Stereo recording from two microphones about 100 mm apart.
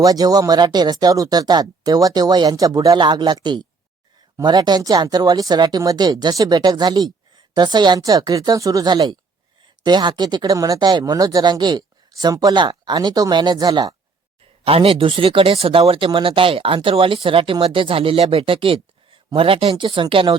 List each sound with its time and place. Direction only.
0.0 s speech: 40° right (ahead or behind)
10.8 s speech: 50° right (ahead or behind)
14.6 s speech: 65° right (ahead or behind)